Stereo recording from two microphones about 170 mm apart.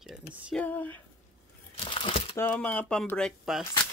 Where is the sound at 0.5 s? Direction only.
10° left (ahead or behind).